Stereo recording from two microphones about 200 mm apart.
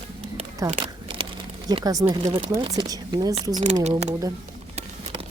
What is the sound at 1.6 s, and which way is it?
Speech, 20° right (ahead or behind).